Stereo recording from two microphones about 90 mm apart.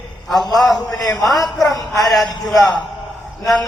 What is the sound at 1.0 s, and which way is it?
Speech, 45° left (ahead or behind).